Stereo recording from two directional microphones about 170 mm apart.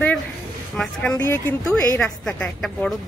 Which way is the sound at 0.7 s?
10° left (ahead or behind).